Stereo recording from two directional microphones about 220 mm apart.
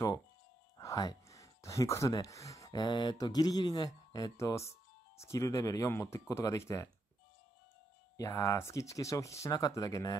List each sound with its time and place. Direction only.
0.7 s speech: 15° left (ahead or behind)
8.2 s speech: 15° left (ahead or behind)